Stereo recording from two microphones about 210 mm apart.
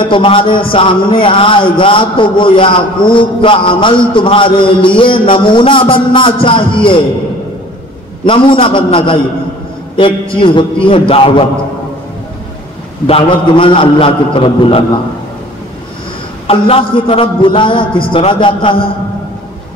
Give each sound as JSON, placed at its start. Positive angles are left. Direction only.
{"t": 0.0, "sound": "a man's voice", "side_deg": 25}
{"t": 8.3, "sound": "a man's voice", "side_deg": 25}
{"t": 13.0, "sound": "a man's voice", "side_deg": 25}
{"t": 16.4, "sound": "a man's voice", "side_deg": 25}